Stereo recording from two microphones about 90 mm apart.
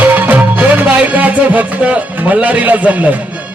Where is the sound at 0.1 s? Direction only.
20° right (ahead or behind).